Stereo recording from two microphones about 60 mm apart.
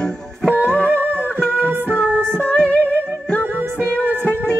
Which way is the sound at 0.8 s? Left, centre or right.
Right.